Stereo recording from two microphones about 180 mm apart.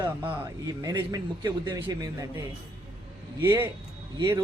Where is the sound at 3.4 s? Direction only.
20° right (ahead or behind).